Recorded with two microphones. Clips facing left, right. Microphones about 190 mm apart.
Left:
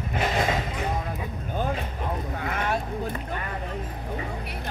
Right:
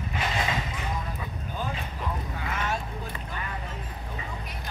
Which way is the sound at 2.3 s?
55° left (ahead or behind).